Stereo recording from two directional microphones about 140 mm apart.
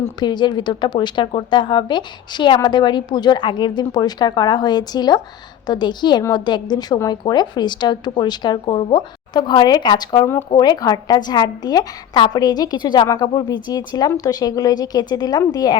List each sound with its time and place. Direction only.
0.2 s a woman's voice: 30° left (ahead or behind)